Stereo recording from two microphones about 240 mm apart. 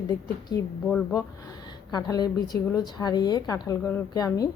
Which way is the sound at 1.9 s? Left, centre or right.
Centre.